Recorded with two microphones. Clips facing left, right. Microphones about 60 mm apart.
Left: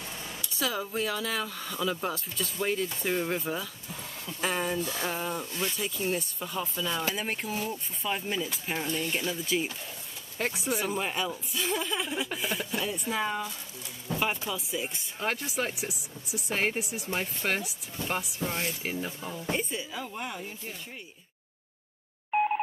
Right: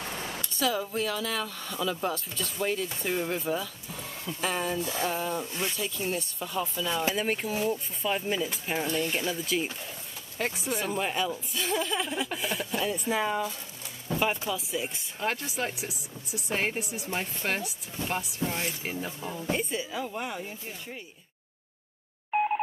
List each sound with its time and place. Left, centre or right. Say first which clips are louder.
0.0 s a sound: right 4 dB; right
0.5 s speech: right 2 dB; centre
5.4 s speech: right 1 dB; centre
5.8 s speech: left 1 dB; centre
14.0 s pigeon: right 2 dB; centre
14.5 s speech: right 2 dB; centre
19.2 s speech: right 2 dB; centre
19.5 s speech: right 2 dB; centre
22.3 s telephone dialing: even; centre